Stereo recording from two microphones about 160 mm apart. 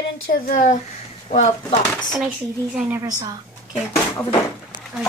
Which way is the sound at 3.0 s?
25° right (ahead or behind).